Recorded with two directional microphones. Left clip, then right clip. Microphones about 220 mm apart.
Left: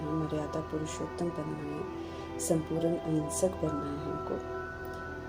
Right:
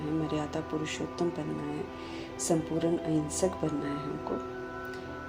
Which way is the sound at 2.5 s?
60° right (ahead or behind).